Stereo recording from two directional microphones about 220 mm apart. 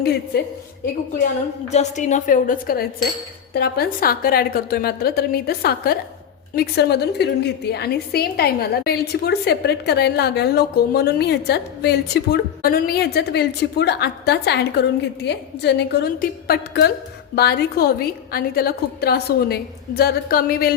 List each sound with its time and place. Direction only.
1.7 s a woman's voice: 35° left (ahead or behind)